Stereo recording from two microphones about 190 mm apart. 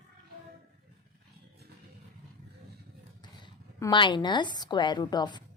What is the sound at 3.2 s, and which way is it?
A woman's voice, 25° left (ahead or behind).